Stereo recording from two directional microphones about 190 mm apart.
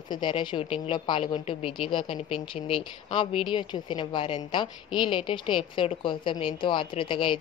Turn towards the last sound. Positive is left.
turn(degrees=25)  # may be behind; listen again after turning